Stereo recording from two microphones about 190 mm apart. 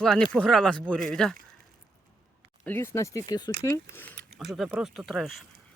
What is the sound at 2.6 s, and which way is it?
Speech, 10° left (ahead or behind).